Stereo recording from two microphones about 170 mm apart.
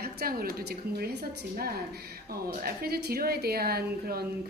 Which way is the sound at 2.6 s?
65° right (ahead or behind).